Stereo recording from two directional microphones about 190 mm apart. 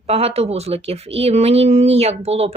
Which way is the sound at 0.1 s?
30° right (ahead or behind).